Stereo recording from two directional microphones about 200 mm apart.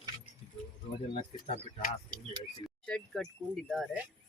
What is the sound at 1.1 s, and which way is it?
Speech, 30° left (ahead or behind).